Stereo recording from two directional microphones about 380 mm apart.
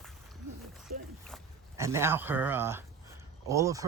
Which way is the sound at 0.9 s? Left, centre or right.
Right.